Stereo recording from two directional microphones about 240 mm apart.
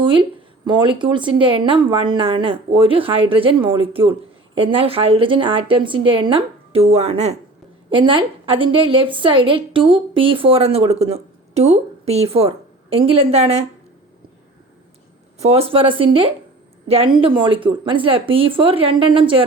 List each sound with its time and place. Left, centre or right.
0.0 s speech: right
15.4 s speech: right